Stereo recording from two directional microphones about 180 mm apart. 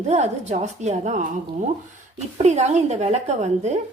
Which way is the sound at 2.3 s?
40° right (ahead or behind).